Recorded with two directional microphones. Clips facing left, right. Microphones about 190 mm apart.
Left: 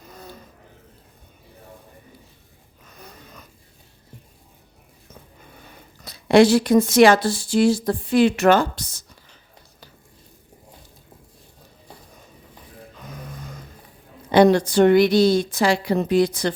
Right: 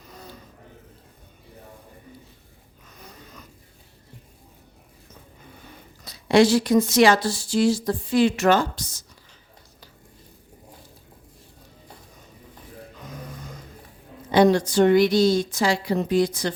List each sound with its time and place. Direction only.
6.1 s speech: 55° left (ahead or behind)
14.3 s speech: 60° left (ahead or behind)